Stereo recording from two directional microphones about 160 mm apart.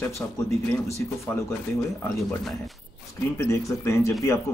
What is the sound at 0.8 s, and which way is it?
Speech, 20° left (ahead or behind).